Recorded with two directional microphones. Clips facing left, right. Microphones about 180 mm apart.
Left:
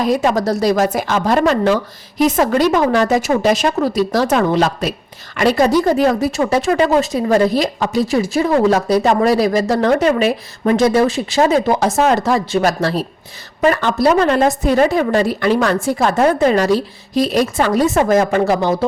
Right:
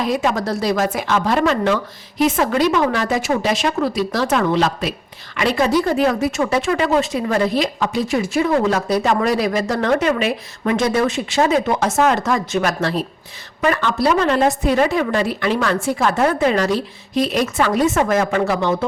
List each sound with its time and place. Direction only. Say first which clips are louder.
0.0 s speech: left 4 dB; 40° left (ahead or behind)